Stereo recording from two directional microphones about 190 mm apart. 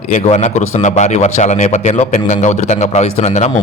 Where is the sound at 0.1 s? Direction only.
40° left (ahead or behind).